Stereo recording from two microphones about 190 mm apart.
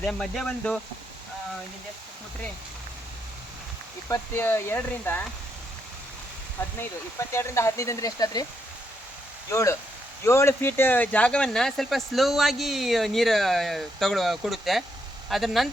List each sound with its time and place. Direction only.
0.0 s speech: 5° left (ahead or behind)
4.1 s speech: 10° left (ahead or behind)
6.6 s speech: 10° left (ahead or behind)
9.5 s speech: 15° left (ahead or behind); by 15.7 s centre (ahead or behind)